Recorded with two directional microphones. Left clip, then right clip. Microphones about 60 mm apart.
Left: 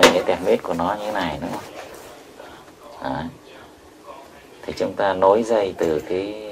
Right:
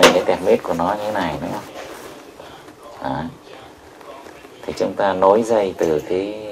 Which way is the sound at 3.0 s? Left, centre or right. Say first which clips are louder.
Right 2 dB; centre.